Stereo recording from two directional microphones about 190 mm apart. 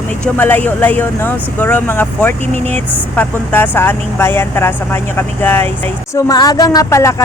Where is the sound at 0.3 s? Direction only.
10° left (ahead or behind).